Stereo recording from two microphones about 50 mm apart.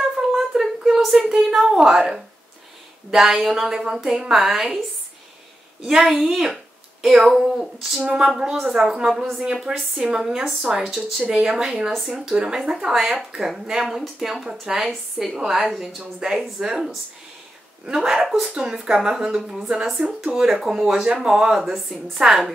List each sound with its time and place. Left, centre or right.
0.0 s a sound: centre
0.8 s a woman's voice: centre
5.9 s speech: centre
8.0 s a woman's voice: centre
9.7 s speech: centre
10.2 s a woman's voice: centre